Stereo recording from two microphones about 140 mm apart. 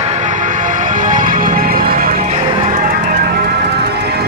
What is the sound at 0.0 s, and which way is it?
Music, 55° right (ahead or behind).